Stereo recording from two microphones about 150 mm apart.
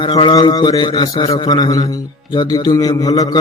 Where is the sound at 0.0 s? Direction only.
35° left (ahead or behind).